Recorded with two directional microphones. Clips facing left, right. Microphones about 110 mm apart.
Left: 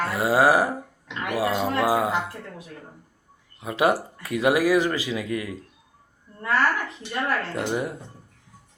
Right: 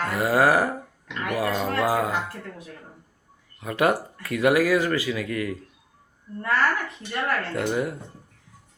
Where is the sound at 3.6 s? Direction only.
15° left (ahead or behind).